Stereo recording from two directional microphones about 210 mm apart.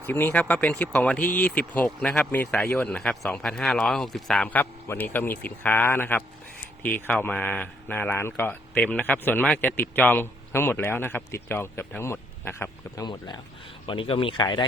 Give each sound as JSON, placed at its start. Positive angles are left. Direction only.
{"t": 0.1, "sound": "speech", "side_deg": 10}